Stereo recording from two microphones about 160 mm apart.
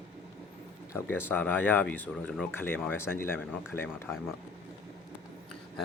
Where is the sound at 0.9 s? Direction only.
15° left (ahead or behind).